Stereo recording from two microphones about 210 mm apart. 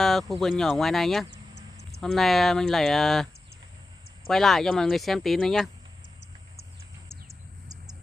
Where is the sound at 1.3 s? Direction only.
55° left (ahead or behind).